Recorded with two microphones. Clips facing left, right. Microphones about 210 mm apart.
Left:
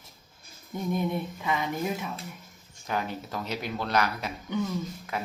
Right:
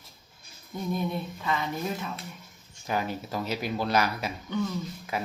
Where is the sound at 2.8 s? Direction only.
5° right (ahead or behind).